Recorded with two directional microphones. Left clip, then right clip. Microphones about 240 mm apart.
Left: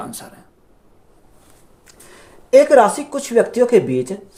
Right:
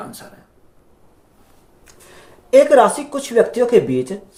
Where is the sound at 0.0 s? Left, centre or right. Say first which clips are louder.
Left 2 dB; left.